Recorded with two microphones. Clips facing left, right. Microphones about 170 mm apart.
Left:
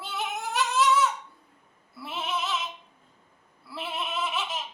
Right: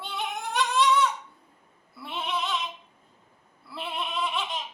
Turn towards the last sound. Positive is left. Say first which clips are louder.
# right 1 dB
turn(degrees=5)  # may be behind; listen again after turning